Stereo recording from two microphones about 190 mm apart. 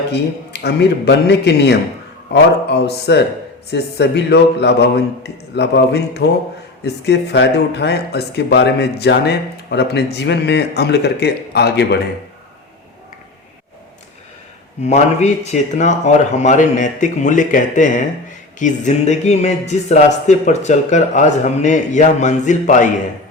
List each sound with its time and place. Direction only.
0.1 s speech: 60° left (ahead or behind)
14.8 s speech: 35° left (ahead or behind)